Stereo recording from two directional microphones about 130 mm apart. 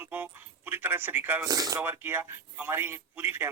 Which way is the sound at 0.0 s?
15° right (ahead or behind).